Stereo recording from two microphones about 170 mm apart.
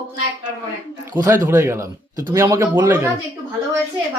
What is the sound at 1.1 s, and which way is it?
Speech, 20° right (ahead or behind).